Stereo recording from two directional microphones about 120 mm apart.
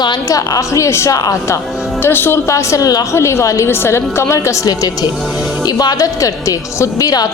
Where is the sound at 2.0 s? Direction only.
20° left (ahead or behind).